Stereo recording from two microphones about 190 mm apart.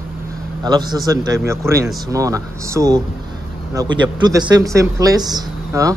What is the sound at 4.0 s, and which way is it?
A man's voice, 20° right (ahead or behind).